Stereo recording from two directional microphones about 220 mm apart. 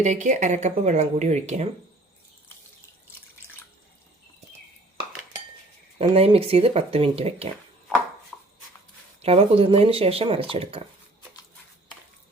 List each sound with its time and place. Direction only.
0.0 s speech: 35° right (ahead or behind)
6.0 s speech: 25° right (ahead or behind)
8.3 s a sound: 5° left (ahead or behind)
9.2 s speech: 25° right (ahead or behind)